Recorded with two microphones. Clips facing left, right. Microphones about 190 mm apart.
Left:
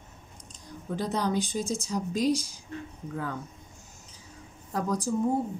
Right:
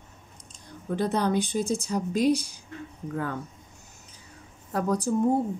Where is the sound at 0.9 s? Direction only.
60° right (ahead or behind).